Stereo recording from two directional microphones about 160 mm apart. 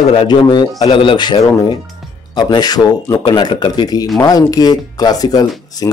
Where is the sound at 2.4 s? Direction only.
25° left (ahead or behind).